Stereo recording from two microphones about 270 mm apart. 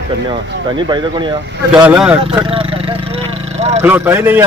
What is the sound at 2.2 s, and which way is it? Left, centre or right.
Speech, centre.